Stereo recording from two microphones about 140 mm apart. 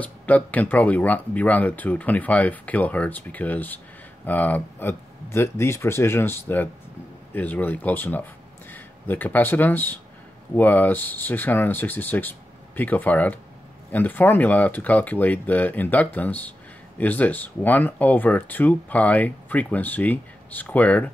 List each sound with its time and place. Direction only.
0.0 s speech: 10° left (ahead or behind)